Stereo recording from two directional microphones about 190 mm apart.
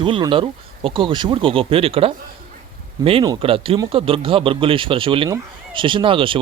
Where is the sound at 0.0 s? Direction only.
25° right (ahead or behind).